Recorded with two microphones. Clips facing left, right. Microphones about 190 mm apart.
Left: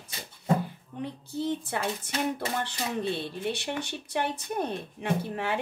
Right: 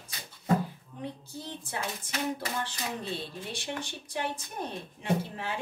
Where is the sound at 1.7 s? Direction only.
65° left (ahead or behind).